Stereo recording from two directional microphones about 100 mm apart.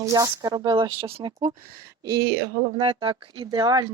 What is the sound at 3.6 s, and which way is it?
Speech, 45° right (ahead or behind).